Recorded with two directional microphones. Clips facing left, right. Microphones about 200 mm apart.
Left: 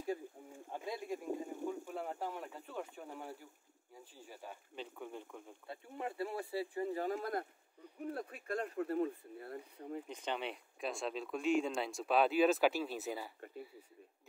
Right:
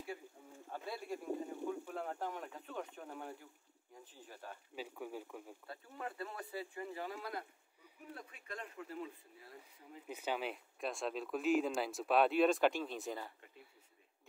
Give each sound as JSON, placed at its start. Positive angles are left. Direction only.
{"t": 0.7, "sound": "a sound", "side_deg": 15}
{"t": 1.7, "sound": "speech", "side_deg": 10}
{"t": 4.7, "sound": "speech", "side_deg": -5}
{"t": 5.7, "sound": "speech", "side_deg": 25}
{"t": 10.0, "sound": "speech", "side_deg": -5}